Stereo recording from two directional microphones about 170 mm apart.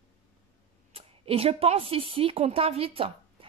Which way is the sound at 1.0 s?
35° right (ahead or behind).